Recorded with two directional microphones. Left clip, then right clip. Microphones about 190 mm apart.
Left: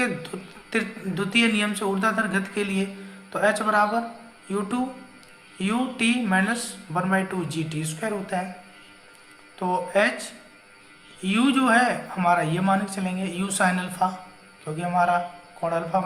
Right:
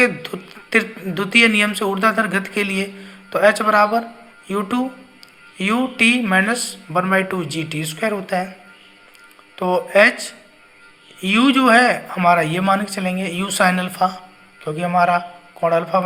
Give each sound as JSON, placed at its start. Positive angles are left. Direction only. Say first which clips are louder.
{"t": 0.0, "sound": "a woman's voice", "louder": "right 10 dB", "side_deg": -45}
{"t": 9.6, "sound": "speech", "louder": "right 8 dB", "side_deg": -45}